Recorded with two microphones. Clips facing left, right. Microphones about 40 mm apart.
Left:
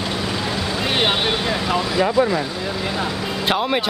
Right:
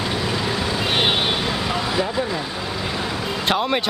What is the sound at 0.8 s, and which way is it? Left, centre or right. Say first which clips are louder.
Vehicle: left 1 dB; centre.